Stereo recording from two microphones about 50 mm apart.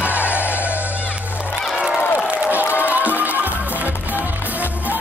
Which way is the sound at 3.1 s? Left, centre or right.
Right.